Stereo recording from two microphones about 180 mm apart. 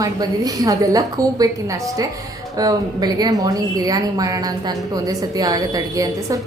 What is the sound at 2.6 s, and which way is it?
A woman's voice, 20° right (ahead or behind).